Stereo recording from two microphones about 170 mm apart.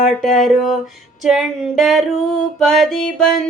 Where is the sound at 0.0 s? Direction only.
Centre (ahead or behind).